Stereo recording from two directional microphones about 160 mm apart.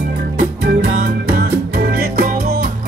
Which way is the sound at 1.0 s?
60° right (ahead or behind).